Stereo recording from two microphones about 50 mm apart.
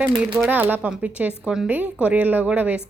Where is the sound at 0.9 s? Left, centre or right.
Right.